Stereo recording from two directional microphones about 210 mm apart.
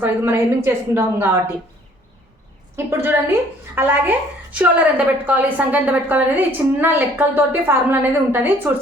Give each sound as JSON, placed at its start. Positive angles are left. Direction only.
{"t": 0.0, "sound": "a woman's voice", "side_deg": -10}
{"t": 2.7, "sound": "a woman's voice", "side_deg": -10}